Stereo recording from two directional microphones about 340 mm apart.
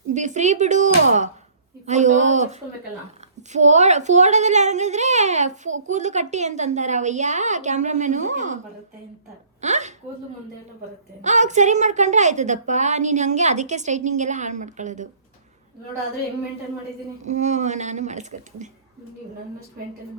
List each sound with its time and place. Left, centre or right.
0.1 s a woman's voice: right
9.6 s a sound: right
11.2 s a woman's voice: right
17.2 s a woman's voice: right